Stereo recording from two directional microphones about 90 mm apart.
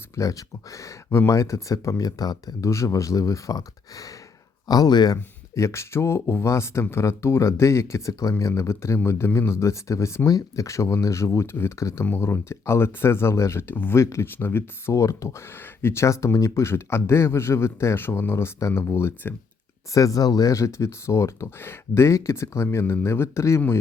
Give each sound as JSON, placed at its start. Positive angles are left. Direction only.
{"t": 0.2, "sound": "speech", "side_deg": 40}
{"t": 2.6, "sound": "speech", "side_deg": 35}
{"t": 5.5, "sound": "speech", "side_deg": 30}
{"t": 19.9, "sound": "speech", "side_deg": 40}